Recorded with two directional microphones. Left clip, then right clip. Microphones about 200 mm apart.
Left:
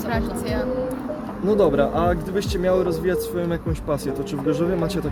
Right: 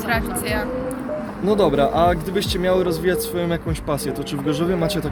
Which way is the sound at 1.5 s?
45° right (ahead or behind).